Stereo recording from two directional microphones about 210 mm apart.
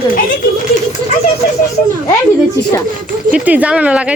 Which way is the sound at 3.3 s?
5° right (ahead or behind).